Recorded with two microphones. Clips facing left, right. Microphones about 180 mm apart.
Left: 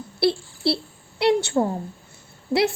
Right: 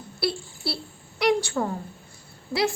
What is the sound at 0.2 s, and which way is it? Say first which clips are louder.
Speech: left 7 dB; 25° left (ahead or behind).